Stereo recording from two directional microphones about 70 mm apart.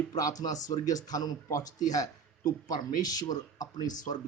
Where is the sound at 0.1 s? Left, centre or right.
Left.